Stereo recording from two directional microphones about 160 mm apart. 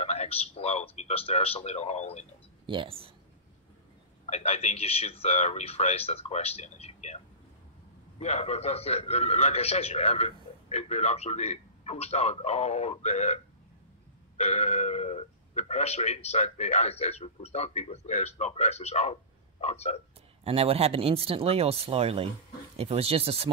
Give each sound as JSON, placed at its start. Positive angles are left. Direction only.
{"t": 0.0, "sound": "a man's voice", "side_deg": 40}
{"t": 2.6, "sound": "speech", "side_deg": -30}
{"t": 4.3, "sound": "a man's voice", "side_deg": 40}
{"t": 8.2, "sound": "a man's voice", "side_deg": 40}
{"t": 20.4, "sound": "speech", "side_deg": -40}